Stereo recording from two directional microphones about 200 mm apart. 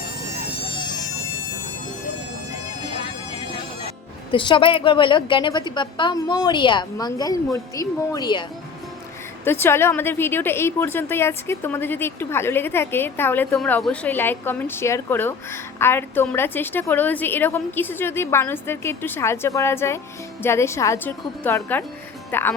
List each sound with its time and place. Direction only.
4.3 s a woman's voice: 25° left (ahead or behind)
9.4 s a woman's voice: 10° left (ahead or behind)